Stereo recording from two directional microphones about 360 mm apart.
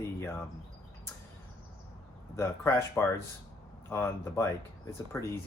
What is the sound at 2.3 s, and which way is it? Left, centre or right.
Speech, centre.